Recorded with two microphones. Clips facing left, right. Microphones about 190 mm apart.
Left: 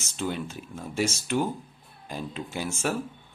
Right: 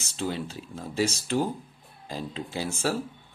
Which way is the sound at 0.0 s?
30° right (ahead or behind).